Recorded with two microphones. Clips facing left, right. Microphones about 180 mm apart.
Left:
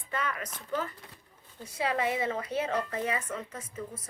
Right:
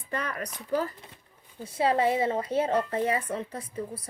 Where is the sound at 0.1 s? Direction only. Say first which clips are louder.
Right 2 dB; 40° right (ahead or behind).